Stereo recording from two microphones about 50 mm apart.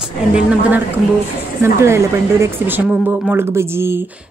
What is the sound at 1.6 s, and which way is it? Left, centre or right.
Speech, right.